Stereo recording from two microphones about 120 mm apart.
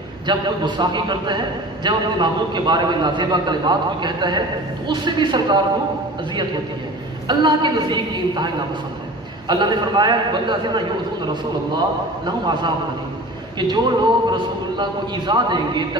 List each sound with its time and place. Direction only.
0.3 s a man's voice: 40° right (ahead or behind)
7.2 s a man's voice: 40° right (ahead or behind)
9.5 s a man's voice: 40° right (ahead or behind)
12.3 s a man's voice: 40° right (ahead or behind)